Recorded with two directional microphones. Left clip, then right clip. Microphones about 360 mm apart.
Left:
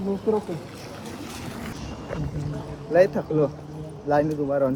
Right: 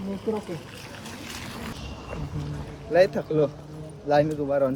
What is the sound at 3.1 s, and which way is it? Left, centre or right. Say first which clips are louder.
Speech: left 1 dB; centre.